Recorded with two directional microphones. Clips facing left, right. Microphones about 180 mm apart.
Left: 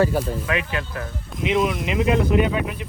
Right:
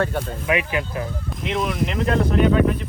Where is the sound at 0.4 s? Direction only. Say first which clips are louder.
Right 3 dB; 15° right (ahead or behind).